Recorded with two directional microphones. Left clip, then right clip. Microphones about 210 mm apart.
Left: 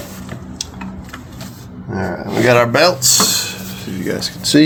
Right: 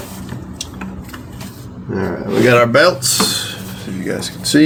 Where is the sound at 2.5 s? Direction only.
40° left (ahead or behind).